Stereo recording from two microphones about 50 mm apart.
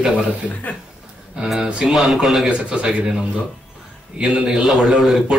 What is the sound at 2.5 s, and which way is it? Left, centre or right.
Speech, centre.